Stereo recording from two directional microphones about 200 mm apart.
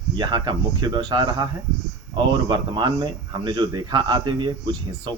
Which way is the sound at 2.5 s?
20° right (ahead or behind).